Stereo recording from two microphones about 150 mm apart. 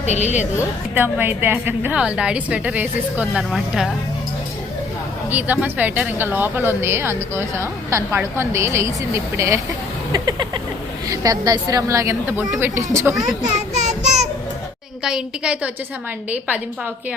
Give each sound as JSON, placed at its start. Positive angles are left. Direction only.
{"t": 0.0, "sound": "a woman's voice", "side_deg": 50}
{"t": 0.9, "sound": "a woman's voice", "side_deg": -15}
{"t": 5.3, "sound": "a woman's voice", "side_deg": -10}
{"t": 10.1, "sound": "a sound", "side_deg": -25}
{"t": 11.1, "sound": "a woman's voice", "side_deg": -25}
{"t": 13.4, "sound": "child singing", "side_deg": -50}
{"t": 15.0, "sound": "a woman's voice", "side_deg": -5}